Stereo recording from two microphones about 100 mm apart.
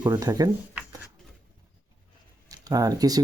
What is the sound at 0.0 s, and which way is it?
Speech, 40° right (ahead or behind).